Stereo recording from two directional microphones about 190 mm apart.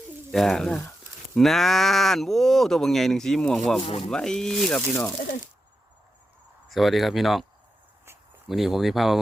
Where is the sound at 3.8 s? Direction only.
30° left (ahead or behind).